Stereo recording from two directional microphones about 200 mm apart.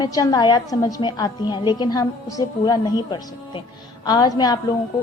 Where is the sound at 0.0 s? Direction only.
20° left (ahead or behind).